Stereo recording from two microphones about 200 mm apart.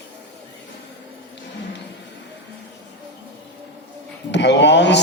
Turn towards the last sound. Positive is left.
turn(degrees=60)  # may be behind; listen again after turning